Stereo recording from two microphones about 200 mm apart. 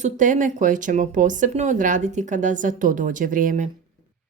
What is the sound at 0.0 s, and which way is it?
Speech, 40° right (ahead or behind).